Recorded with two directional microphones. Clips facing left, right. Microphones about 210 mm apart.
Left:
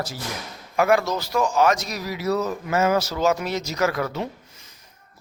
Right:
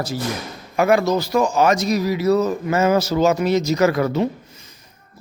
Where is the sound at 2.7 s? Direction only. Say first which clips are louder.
Right 3 dB; 5° left (ahead or behind).